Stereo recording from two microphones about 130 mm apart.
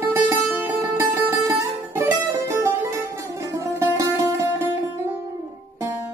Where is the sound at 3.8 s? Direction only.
25° right (ahead or behind).